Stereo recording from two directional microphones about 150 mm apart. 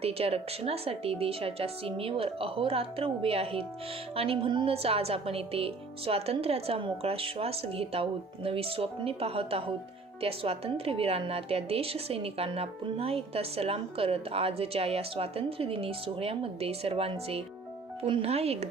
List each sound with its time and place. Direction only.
0.0 s a woman's voice: 40° right (ahead or behind)